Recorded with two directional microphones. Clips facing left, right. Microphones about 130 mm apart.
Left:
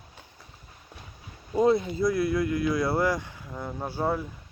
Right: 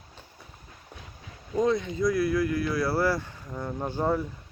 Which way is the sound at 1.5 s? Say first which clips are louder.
Left 3 dB; 30° left (ahead or behind).